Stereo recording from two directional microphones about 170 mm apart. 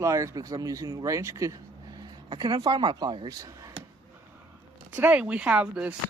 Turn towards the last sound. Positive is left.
turn(degrees=-5)  # may be behind; listen again after turning